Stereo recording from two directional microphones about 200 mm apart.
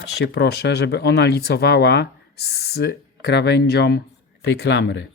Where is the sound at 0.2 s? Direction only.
60° left (ahead or behind).